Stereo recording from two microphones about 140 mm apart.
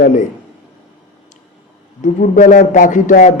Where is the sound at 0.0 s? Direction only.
65° left (ahead or behind).